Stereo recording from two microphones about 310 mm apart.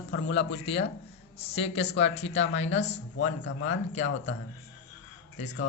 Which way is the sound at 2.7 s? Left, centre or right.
Left.